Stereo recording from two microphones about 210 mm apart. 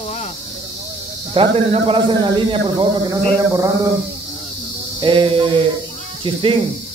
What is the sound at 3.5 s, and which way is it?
Mantra, 15° right (ahead or behind).